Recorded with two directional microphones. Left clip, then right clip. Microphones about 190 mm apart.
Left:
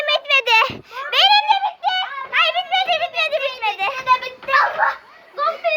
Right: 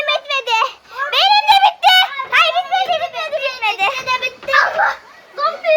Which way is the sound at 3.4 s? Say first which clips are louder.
Right 4 dB; centre (ahead or behind).